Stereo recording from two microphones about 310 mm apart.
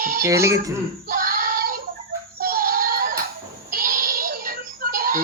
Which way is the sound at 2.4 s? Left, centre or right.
Right.